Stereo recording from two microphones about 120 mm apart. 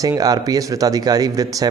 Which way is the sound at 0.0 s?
30° right (ahead or behind).